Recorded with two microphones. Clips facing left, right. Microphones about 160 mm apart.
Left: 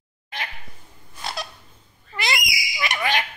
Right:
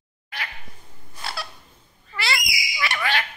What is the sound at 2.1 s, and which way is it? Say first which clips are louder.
Owl: left 1 dB; 20° left (ahead or behind).